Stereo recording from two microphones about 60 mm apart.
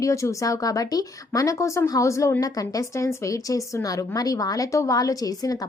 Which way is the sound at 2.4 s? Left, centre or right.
Left.